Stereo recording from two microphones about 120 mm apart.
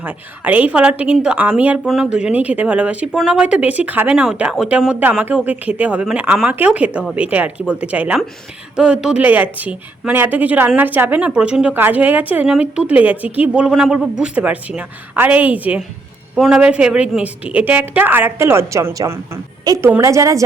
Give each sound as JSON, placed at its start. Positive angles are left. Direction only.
{"t": 0.0, "sound": "a woman's voice", "side_deg": -15}